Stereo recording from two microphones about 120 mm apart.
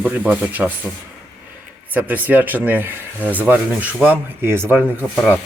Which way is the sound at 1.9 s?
15° right (ahead or behind).